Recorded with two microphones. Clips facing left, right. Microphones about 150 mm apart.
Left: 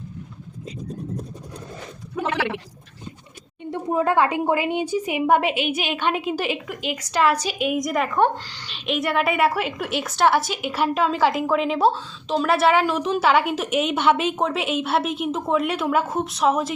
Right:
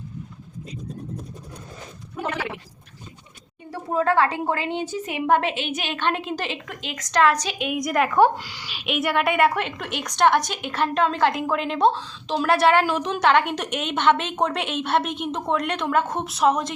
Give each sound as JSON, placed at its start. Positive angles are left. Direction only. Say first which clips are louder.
{"t": 2.2, "sound": "a woman's voice", "louder": "left 4 dB", "side_deg": 90}
{"t": 3.7, "sound": "a woman's voice", "louder": "left 1 dB", "side_deg": 15}